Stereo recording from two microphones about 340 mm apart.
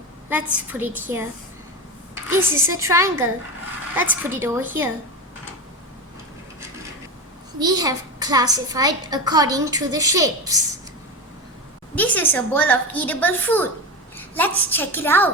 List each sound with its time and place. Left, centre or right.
0.3 s a woman's voice: centre
2.3 s a child's voice: centre
7.6 s a child's voice: centre
11.9 s a woman's voice: centre